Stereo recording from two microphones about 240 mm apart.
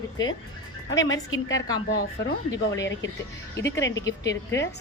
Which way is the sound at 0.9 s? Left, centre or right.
Left.